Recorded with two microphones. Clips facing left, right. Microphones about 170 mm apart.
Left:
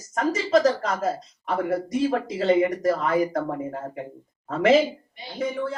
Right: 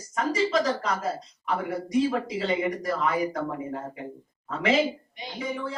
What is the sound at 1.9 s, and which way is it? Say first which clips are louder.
Speech: left 1 dB; 45° left (ahead or behind).